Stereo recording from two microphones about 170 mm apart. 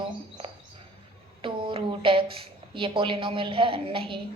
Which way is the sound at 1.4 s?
30° right (ahead or behind).